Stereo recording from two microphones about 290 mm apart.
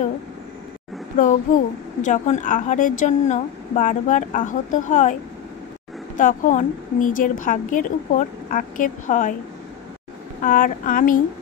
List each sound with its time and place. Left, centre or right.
1.1 s speech: left
6.1 s speech: left
10.4 s speech: left